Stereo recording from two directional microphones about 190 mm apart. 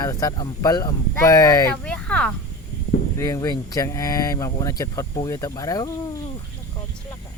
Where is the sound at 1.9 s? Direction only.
5° left (ahead or behind).